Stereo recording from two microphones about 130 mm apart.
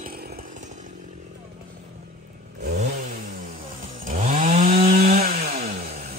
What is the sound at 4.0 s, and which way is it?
Chainsaw, 85° right.